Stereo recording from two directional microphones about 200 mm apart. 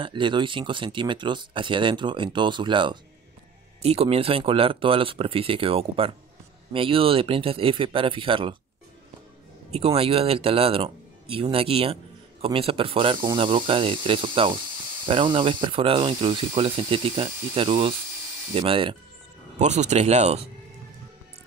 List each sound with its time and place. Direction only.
0.0 s speech: 25° right (ahead or behind)
9.7 s speech: 30° right (ahead or behind)